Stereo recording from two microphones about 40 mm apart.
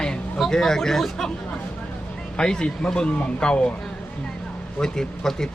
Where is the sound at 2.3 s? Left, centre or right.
Centre.